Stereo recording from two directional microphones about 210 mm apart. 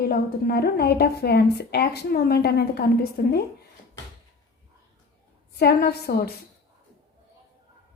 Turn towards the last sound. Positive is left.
turn(degrees=50)  # may be behind; listen again after turning